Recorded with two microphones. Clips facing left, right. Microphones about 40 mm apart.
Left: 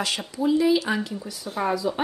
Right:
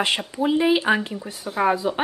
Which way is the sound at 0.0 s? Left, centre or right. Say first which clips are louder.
Right 3 dB; right.